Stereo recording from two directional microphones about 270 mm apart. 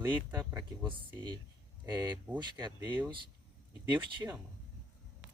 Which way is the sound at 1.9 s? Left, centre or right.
Centre.